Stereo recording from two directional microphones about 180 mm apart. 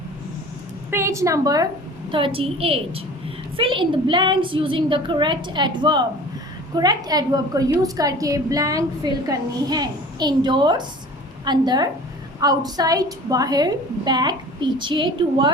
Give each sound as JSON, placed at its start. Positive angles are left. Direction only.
{"t": 0.9, "sound": "a woman's voice", "side_deg": -15}
{"t": 2.0, "sound": "a woman's voice", "side_deg": -30}